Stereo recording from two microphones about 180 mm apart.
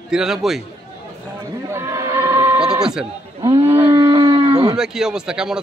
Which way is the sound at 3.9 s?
25° right (ahead or behind).